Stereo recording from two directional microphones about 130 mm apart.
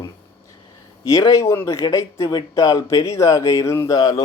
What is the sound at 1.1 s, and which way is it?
Speech, 25° left (ahead or behind).